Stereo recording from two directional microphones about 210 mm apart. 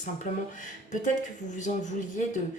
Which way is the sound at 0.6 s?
35° left (ahead or behind).